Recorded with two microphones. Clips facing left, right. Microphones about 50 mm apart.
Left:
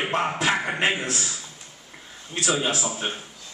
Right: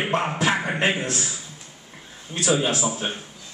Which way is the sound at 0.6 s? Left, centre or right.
Centre.